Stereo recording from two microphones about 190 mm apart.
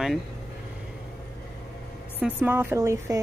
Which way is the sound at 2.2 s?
10° right (ahead or behind).